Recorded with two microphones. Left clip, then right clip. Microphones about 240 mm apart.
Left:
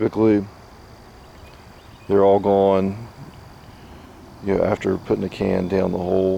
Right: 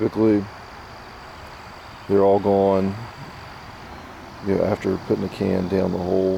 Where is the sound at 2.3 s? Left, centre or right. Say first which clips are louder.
Left 2 dB; right.